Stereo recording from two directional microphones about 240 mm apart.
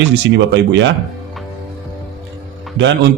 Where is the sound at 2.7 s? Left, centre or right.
Right.